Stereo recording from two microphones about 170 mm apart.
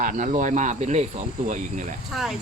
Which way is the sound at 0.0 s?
50° right (ahead or behind).